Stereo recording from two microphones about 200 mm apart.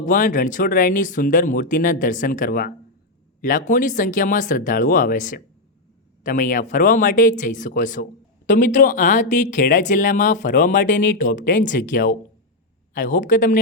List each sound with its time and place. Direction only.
0.0 s a woman's voice: 40° left (ahead or behind)